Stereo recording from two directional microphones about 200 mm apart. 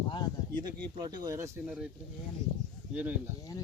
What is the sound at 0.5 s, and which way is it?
Speech, 20° right (ahead or behind).